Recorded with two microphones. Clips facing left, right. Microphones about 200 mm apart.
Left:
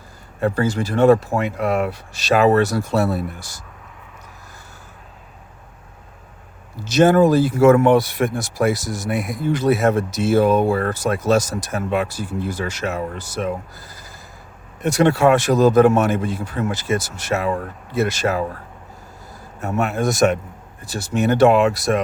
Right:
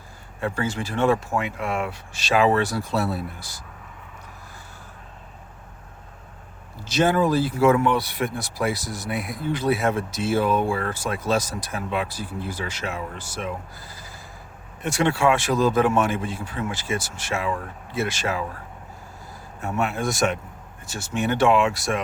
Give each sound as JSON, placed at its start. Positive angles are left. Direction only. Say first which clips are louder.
{"t": 0.3, "sound": "speech", "louder": "left 7 dB", "side_deg": 40}
{"t": 6.8, "sound": "speech", "louder": "left 7 dB", "side_deg": 45}
{"t": 19.6, "sound": "speech", "louder": "left 5 dB", "side_deg": 40}